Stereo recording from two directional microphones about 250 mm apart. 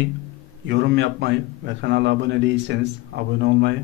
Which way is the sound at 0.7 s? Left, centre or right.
Right.